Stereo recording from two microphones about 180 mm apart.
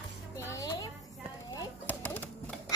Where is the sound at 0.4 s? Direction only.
15° left (ahead or behind).